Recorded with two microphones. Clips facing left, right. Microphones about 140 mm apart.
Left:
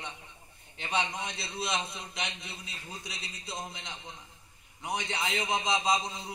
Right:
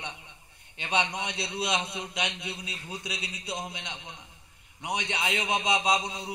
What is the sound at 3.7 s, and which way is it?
Speech, 85° right.